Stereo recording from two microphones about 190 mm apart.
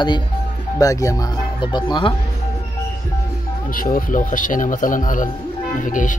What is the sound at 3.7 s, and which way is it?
Speech, 45° left (ahead or behind).